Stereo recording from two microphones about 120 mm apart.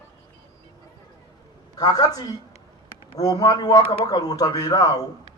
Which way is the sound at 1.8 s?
35° left (ahead or behind).